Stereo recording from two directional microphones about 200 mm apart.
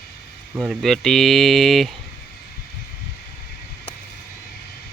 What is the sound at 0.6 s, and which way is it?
Speech, centre (ahead or behind).